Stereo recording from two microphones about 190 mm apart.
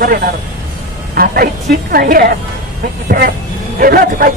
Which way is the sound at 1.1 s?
50° right (ahead or behind).